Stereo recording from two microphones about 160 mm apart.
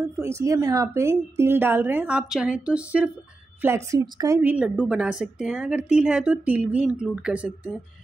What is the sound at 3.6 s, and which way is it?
Speech, 20° right (ahead or behind).